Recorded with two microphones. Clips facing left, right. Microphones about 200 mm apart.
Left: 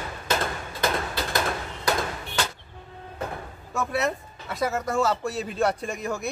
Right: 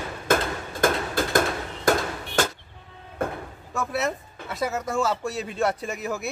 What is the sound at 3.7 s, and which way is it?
Speech, centre (ahead or behind).